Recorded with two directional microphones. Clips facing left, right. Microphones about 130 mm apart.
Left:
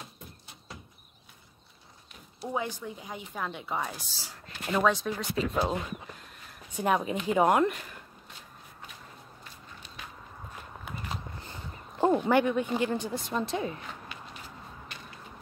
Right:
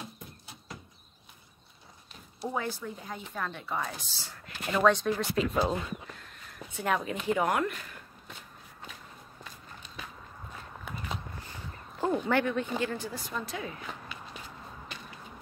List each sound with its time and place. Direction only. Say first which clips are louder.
2.5 s speech: left 2 dB; 15° left (ahead or behind)
6.7 s speech: left 3 dB; 20° left (ahead or behind)
12.0 s speech: left 4 dB; 20° left (ahead or behind)